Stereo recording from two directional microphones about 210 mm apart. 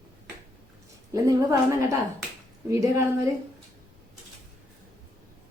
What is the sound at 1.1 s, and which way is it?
A woman's voice, 15° right (ahead or behind).